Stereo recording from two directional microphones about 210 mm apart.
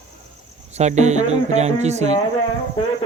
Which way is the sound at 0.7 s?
35° right (ahead or behind).